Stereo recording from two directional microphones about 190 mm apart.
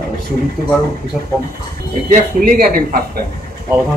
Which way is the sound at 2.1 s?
45° right (ahead or behind).